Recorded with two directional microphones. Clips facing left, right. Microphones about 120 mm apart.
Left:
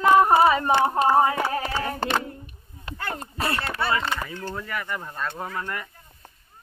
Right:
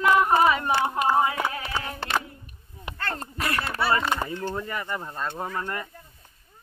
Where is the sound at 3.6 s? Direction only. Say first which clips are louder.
Even; 5° right (ahead or behind).